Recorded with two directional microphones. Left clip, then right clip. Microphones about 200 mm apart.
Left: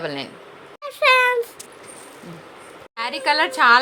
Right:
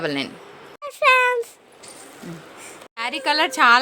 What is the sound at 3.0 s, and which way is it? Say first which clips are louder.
Speech: left 1 dB; 35° right (ahead or behind).